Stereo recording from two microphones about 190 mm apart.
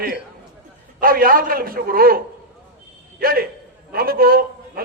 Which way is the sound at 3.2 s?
50° right (ahead or behind).